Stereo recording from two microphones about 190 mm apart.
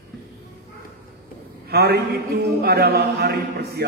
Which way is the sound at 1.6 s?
60° right (ahead or behind).